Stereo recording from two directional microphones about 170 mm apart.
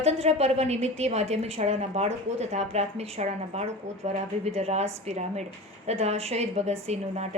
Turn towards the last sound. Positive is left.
turn(degrees=-40)  # may be behind; listen again after turning